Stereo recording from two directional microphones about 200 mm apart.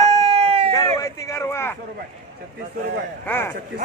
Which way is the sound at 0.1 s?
30° right (ahead or behind).